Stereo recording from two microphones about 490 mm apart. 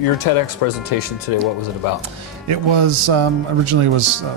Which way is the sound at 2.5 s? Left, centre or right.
Right.